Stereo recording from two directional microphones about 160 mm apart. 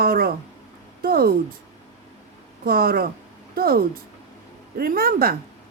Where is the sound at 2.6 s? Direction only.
70° right (ahead or behind).